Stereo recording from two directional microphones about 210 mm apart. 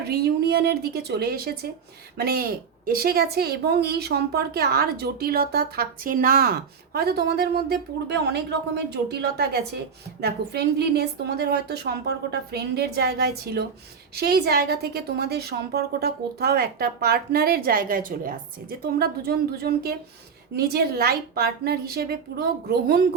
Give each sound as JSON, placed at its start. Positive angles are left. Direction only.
{"t": 0.0, "sound": "a woman's voice", "side_deg": -50}